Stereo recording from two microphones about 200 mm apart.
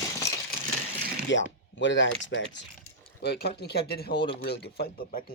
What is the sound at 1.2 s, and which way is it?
Speech, 65° left (ahead or behind).